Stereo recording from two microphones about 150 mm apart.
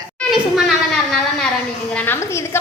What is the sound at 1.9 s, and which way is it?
Speech, 15° left (ahead or behind).